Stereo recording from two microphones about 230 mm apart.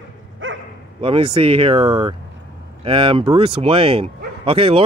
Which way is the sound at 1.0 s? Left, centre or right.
Right.